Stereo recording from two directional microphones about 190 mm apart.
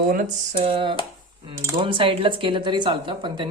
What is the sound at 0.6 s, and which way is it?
Speech, 30° right (ahead or behind).